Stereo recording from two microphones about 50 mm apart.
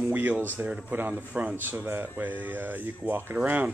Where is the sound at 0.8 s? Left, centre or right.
Right.